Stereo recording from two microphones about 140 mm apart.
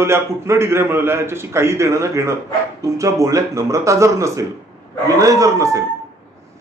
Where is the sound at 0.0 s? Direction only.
20° right (ahead or behind).